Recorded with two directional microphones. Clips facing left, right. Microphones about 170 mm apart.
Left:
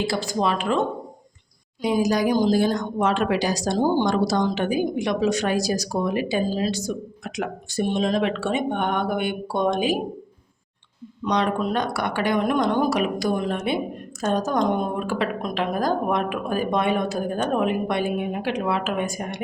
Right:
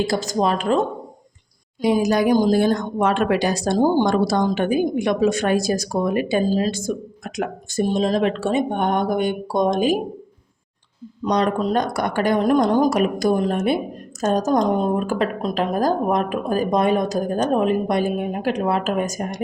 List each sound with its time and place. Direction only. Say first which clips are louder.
0.0 s speech: right 3 dB; 45° right (ahead or behind)
1.8 s speech: right 3 dB; 55° right (ahead or behind)
11.3 s a woman's voice: right 3 dB; 40° right (ahead or behind)